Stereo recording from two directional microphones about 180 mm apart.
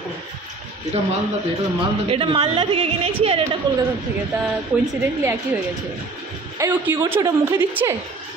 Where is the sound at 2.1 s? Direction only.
30° right (ahead or behind).